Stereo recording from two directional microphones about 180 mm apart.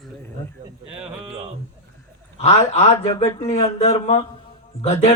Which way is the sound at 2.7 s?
40° left (ahead or behind).